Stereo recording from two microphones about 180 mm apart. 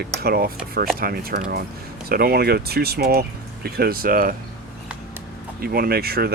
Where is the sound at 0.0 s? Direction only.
60° right (ahead or behind).